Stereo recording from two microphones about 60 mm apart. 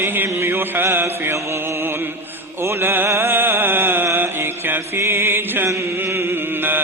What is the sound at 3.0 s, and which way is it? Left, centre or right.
Music, right.